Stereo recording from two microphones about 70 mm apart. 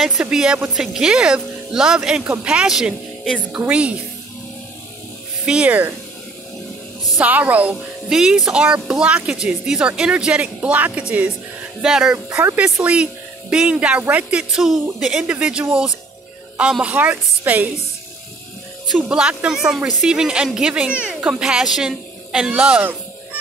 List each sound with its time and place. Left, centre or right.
0.2 s speech: centre
5.4 s speech: centre
7.2 s speech: right
8.1 s speech: centre
11.8 s a woman's voice: centre
14.5 s speech: centre; by 17.6 s right
19.0 s speech: centre